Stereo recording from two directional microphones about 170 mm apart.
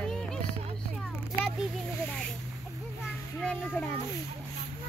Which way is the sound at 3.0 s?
5° left (ahead or behind).